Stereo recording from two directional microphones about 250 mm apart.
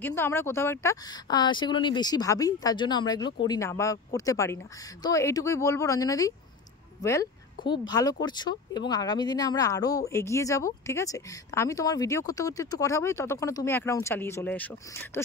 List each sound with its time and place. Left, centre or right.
0.0 s speech: centre